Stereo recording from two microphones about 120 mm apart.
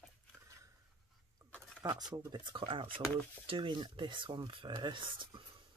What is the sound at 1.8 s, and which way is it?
Speech, 30° right (ahead or behind).